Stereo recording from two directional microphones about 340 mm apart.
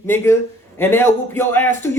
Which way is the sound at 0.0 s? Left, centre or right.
Centre.